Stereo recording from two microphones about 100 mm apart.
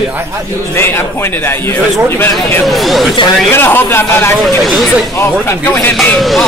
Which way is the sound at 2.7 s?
Centre (ahead or behind).